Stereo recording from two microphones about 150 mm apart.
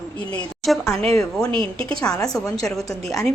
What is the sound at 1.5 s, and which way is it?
Speech, 35° right (ahead or behind).